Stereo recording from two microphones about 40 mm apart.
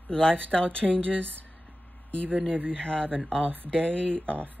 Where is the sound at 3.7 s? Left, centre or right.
Left.